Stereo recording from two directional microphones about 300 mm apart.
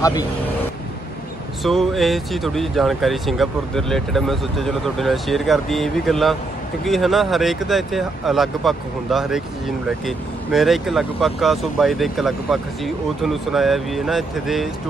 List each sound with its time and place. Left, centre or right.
1.6 s speech: centre